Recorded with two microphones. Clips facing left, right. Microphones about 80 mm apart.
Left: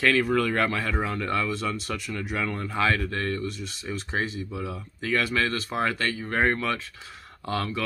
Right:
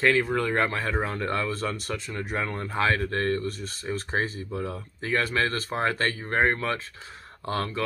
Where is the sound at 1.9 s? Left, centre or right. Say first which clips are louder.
Even; right.